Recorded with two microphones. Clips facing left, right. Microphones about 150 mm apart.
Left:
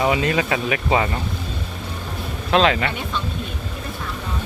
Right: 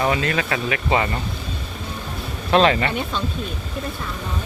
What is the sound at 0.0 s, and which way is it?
Speech, 15° left (ahead or behind).